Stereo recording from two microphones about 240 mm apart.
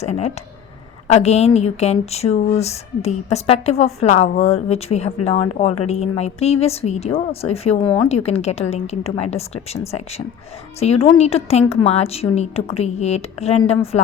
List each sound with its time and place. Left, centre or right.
0.0 s speech: left